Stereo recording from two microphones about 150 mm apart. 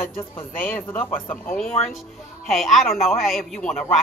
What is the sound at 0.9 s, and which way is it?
A man's voice, 10° left (ahead or behind).